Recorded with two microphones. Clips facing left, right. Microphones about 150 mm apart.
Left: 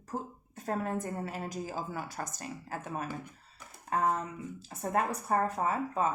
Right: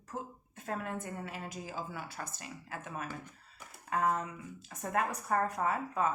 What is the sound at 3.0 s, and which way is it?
Speech, 10° left (ahead or behind).